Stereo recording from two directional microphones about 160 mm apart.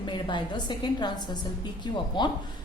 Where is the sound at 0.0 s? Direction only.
30° left (ahead or behind).